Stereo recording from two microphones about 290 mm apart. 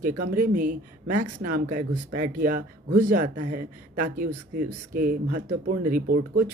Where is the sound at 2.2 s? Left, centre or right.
Right.